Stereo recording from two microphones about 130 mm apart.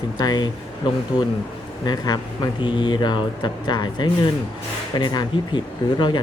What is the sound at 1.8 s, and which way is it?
Speech, 30° left (ahead or behind).